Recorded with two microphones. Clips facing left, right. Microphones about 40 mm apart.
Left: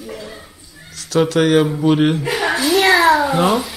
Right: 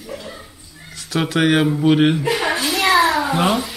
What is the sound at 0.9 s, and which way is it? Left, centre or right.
Speech, centre.